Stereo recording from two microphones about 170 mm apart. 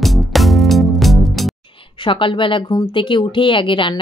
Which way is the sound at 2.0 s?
30° left (ahead or behind).